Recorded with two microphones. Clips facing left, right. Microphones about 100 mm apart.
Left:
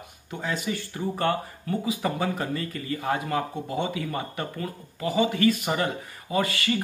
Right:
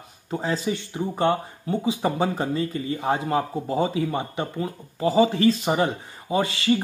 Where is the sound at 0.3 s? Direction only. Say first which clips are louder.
Right 4 dB; 30° right (ahead or behind).